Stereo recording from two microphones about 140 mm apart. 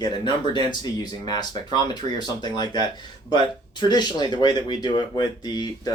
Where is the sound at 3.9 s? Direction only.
30° left (ahead or behind).